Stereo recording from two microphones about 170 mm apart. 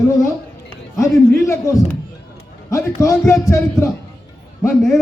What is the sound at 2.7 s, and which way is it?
A man's voice, 20° left (ahead or behind).